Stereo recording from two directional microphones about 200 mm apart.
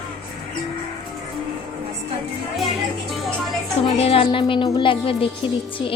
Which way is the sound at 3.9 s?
30° left (ahead or behind).